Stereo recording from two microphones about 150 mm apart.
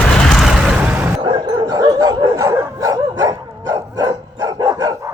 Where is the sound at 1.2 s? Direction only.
30° right (ahead or behind).